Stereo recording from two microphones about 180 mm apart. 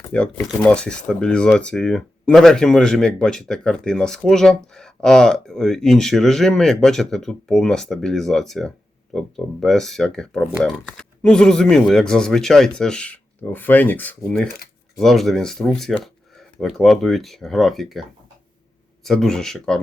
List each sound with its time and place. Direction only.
0.1 s speech: 5° left (ahead or behind)
19.0 s speech: 5° left (ahead or behind)